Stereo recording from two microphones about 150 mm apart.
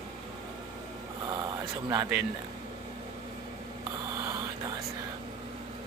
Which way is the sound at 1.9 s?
15° right (ahead or behind).